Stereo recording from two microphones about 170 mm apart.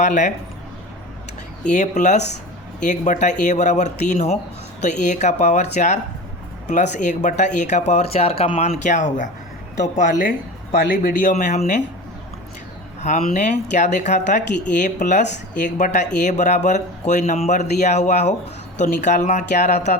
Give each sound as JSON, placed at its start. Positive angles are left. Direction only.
{"t": 0.0, "sound": "speech", "side_deg": 45}
{"t": 1.7, "sound": "speech", "side_deg": 45}
{"t": 8.7, "sound": "speech", "side_deg": 45}
{"t": 13.0, "sound": "speech", "side_deg": 40}